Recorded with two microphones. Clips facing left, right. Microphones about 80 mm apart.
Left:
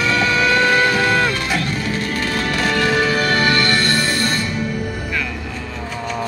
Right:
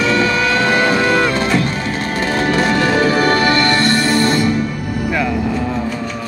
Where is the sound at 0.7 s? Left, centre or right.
Right.